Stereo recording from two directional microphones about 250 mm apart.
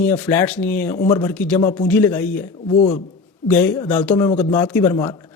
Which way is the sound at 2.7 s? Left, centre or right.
Left.